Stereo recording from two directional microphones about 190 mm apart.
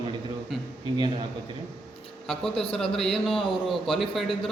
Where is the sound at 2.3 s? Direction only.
Centre (ahead or behind).